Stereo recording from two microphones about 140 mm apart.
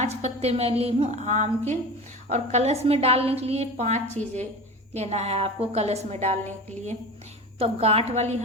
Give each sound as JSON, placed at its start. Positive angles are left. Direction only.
{"t": 0.0, "sound": "a woman's voice", "side_deg": -50}
{"t": 7.6, "sound": "a woman's voice", "side_deg": -45}